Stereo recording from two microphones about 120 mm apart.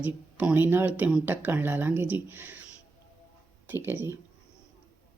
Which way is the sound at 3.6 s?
20° right (ahead or behind).